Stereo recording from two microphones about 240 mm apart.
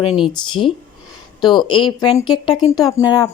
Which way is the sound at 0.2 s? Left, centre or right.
Left.